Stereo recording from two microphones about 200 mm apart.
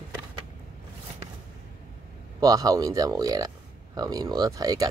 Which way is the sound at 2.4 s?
20° right (ahead or behind).